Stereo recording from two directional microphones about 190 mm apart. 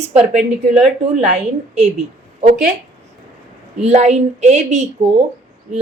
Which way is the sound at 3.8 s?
35° right (ahead or behind).